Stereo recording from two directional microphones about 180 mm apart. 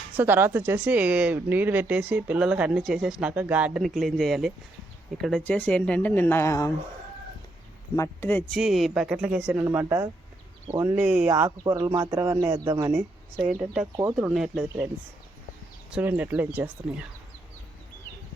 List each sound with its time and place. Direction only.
0.2 s speech: 10° right (ahead or behind); by 6.7 s 15° left (ahead or behind)
7.9 s speech: 15° left (ahead or behind)
8.5 s speech: centre (ahead or behind)
13.9 s speech: 20° right (ahead or behind)
14.2 s speech: 5° right (ahead or behind)
15.9 s speech: 10° right (ahead or behind)